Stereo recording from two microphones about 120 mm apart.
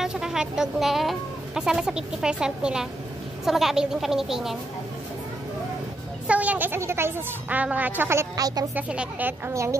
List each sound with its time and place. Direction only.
0.0 s speech: 5° right (ahead or behind)
6.2 s a woman's voice: 10° right (ahead or behind); by 8.6 s 30° right (ahead or behind)
8.7 s a woman's voice: 10° right (ahead or behind)
9.5 s a woman's voice: 25° right (ahead or behind)